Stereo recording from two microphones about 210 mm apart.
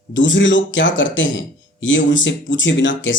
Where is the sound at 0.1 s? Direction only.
60° left (ahead or behind).